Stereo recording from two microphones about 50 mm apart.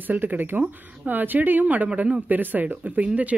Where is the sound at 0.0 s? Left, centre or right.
Right.